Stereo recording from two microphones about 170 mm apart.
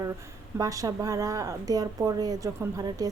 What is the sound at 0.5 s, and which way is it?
Speech, 20° right (ahead or behind).